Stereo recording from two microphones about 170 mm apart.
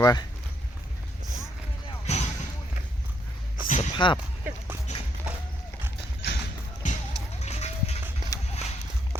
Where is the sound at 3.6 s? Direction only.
45° left (ahead or behind).